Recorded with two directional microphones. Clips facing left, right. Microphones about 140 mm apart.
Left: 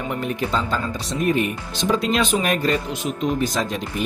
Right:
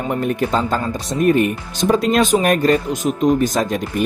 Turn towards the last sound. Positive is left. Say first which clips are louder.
# right 5 dB
turn(degrees=-50)  # may be behind; listen again after turning